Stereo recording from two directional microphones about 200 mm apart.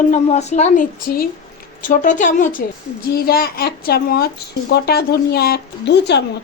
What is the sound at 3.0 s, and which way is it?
A woman's voice, 50° left (ahead or behind).